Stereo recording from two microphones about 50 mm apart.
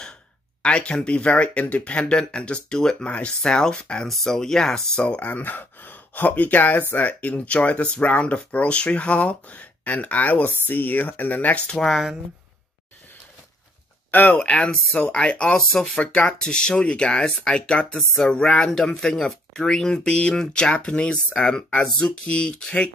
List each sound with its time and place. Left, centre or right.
0.6 s speech: left
4.1 s speech: centre
5.0 s speech: left
11.7 s speech: centre
14.1 s speech: left